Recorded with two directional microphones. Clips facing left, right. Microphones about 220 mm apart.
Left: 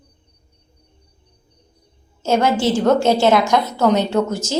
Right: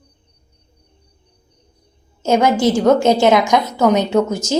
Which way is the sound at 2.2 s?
15° right (ahead or behind).